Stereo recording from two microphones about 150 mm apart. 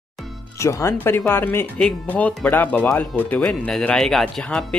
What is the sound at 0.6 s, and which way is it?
Speech, 20° left (ahead or behind).